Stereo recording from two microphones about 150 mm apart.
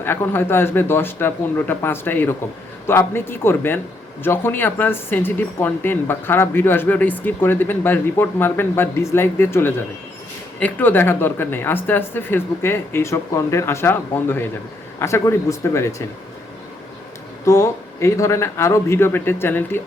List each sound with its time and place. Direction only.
0.0 s speech: 15° left (ahead or behind)
17.4 s speech: 20° left (ahead or behind)